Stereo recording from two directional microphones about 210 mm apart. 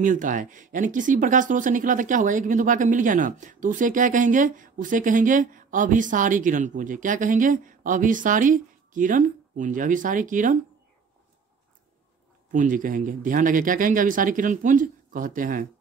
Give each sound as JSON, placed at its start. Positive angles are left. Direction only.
{"t": 0.0, "sound": "speech", "side_deg": -40}
{"t": 12.4, "sound": "speech", "side_deg": -40}